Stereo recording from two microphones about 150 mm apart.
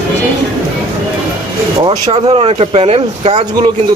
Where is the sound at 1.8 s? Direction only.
35° right (ahead or behind).